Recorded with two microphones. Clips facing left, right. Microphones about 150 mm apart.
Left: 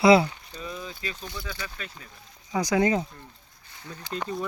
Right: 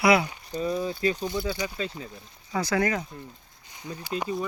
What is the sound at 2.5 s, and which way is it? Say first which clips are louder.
Speech: left 3 dB; 15° left (ahead or behind).